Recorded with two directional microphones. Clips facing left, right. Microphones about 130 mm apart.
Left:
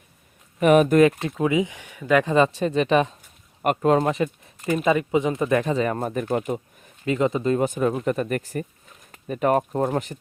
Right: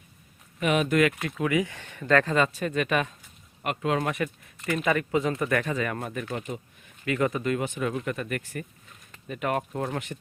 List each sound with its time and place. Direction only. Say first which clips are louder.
0.6 s speech: left 8 dB; 45° left (ahead or behind)
1.4 s speech: left 4 dB; 20° left (ahead or behind)
2.3 s speech: left 6 dB; 25° left (ahead or behind)
3.6 s speech: left 8 dB; 45° left (ahead or behind)
3.9 s speech: left 6 dB; 30° left (ahead or behind)
7.0 s speech: left 4 dB; 25° left (ahead or behind)
7.6 s speech: left 7 dB; 40° left (ahead or behind)